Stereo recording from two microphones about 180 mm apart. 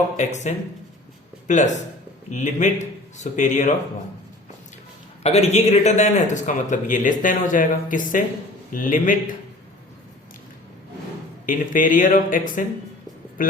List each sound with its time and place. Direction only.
0.2 s a man's voice: 40° left (ahead or behind)
5.2 s a man's voice: 35° left (ahead or behind)
11.4 s a man's voice: 50° left (ahead or behind)